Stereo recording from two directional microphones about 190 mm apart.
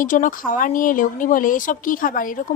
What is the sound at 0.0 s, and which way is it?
Speech, 45° left (ahead or behind).